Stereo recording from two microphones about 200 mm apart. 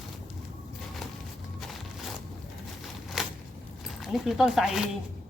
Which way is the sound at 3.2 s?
Centre (ahead or behind).